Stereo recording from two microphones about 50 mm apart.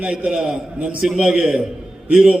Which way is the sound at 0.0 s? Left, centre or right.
Right.